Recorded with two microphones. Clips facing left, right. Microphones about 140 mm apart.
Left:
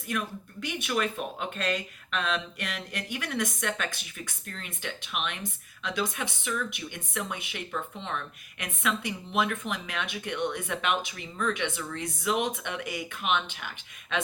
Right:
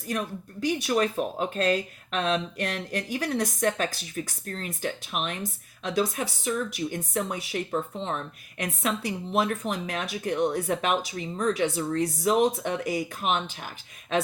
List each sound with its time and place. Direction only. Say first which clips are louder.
0.1 s speech: right 2 dB; 35° right (ahead or behind)